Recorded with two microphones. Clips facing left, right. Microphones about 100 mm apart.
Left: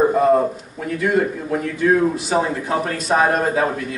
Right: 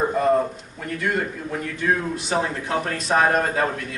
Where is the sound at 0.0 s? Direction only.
10° left (ahead or behind).